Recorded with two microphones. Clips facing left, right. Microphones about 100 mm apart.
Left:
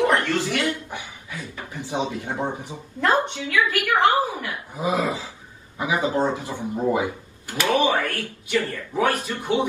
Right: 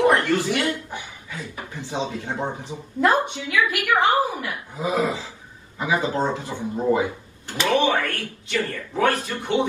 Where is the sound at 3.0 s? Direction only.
15° right (ahead or behind).